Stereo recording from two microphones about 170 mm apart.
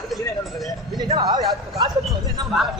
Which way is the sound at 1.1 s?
25° right (ahead or behind).